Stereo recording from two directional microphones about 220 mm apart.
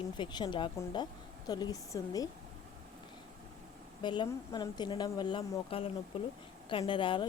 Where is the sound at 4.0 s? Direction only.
20° left (ahead or behind).